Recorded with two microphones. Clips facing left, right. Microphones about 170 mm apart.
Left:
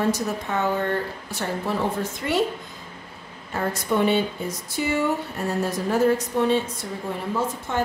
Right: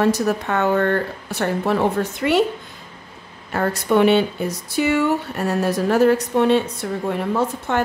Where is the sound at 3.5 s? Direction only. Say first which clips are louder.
Right 6 dB; 70° right (ahead or behind).